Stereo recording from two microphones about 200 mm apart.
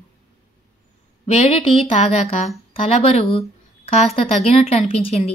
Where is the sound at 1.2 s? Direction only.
30° left (ahead or behind).